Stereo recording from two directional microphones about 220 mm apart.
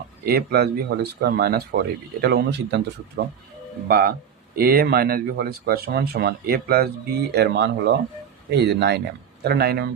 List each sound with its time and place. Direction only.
0.3 s speech: 45° right (ahead or behind)
3.8 s speech: 45° right (ahead or behind)